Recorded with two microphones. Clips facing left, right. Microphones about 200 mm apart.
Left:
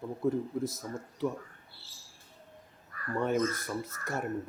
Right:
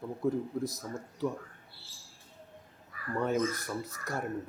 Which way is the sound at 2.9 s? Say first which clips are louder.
Left 1 dB; centre (ahead or behind).